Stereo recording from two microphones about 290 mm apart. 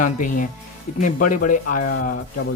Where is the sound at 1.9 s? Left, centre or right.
Left.